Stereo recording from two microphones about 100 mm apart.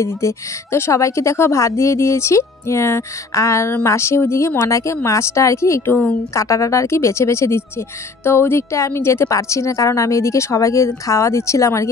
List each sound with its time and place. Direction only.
0.0 s a woman's voice: 25° left (ahead or behind)